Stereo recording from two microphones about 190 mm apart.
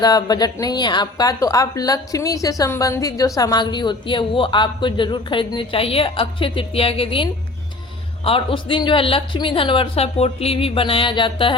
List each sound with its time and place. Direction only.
0.0 s a woman's voice: 20° left (ahead or behind)